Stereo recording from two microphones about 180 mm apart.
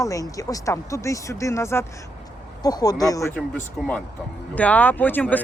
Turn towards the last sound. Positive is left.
turn(degrees=10)  # may be behind; listen again after turning